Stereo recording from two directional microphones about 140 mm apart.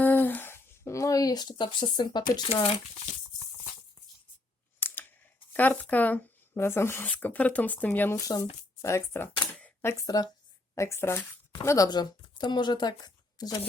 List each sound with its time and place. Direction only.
0.0 s a sound: 15° left (ahead or behind); by 2.2 s 30° left (ahead or behind)
2.6 s speech: 45° left (ahead or behind)
4.8 s computer keyboard: 15° left (ahead or behind)
5.5 s speech: 10° left (ahead or behind)
10.0 s speech: 25° left (ahead or behind)